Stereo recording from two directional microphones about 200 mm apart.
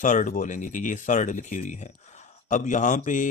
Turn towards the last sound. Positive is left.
turn(degrees=40)  # may be behind; listen again after turning